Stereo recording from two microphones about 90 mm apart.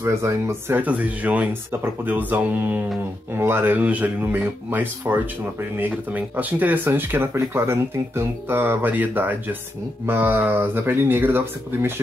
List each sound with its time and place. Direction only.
0.0 s speech: 30° right (ahead or behind)
0.7 s speech: 15° right (ahead or behind)